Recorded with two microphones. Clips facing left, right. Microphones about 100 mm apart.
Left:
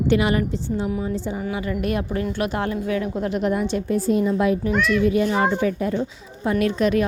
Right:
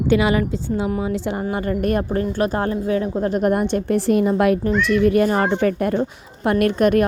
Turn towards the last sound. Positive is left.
turn(degrees=-55)  # may be behind; listen again after turning